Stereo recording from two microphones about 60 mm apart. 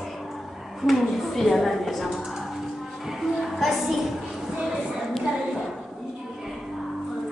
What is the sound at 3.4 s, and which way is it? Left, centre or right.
Speech, centre.